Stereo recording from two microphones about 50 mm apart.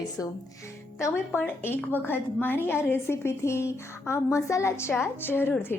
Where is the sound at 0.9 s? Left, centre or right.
Left.